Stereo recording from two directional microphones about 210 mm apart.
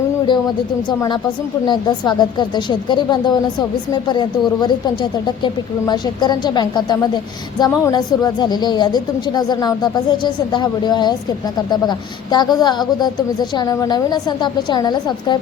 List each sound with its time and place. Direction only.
0.9 s a woman's voice: 20° left (ahead or behind)